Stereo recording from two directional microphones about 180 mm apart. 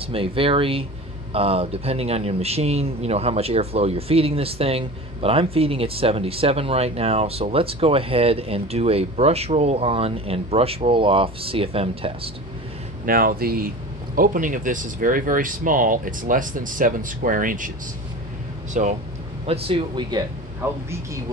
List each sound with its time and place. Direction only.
0.1 s a man's voice: 30° right (ahead or behind)
13.0 s speech: 50° right (ahead or behind)
18.7 s speech: 45° right (ahead or behind)
19.4 s speech: 35° right (ahead or behind)
20.6 s a woman's voice: 15° right (ahead or behind)